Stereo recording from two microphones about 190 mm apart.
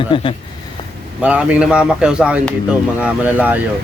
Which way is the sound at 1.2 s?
5° right (ahead or behind).